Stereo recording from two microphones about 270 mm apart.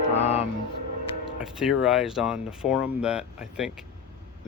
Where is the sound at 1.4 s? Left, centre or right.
Centre.